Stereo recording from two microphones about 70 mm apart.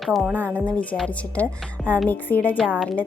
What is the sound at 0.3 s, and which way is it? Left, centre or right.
Speech, right.